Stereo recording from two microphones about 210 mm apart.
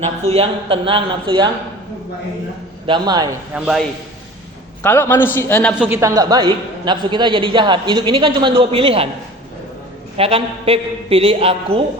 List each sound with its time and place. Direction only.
0.3 s a man's voice: 25° right (ahead or behind)
2.8 s a man's voice: 20° right (ahead or behind)
3.5 s a man's voice: centre (ahead or behind)
4.8 s a man's voice: 10° left (ahead or behind)
5.9 s a man's voice: 15° right (ahead or behind)
10.2 s a man's voice: 25° right (ahead or behind)